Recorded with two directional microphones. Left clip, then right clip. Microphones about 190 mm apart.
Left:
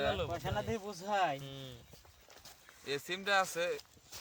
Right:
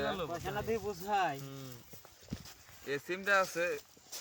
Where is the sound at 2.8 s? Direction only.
45° left (ahead or behind).